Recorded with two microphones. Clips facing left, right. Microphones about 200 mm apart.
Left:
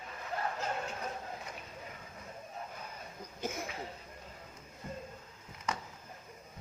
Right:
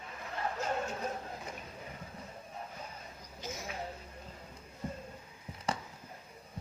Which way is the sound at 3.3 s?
55° left (ahead or behind).